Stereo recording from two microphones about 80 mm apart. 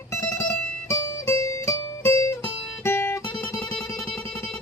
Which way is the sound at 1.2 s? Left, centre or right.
Left.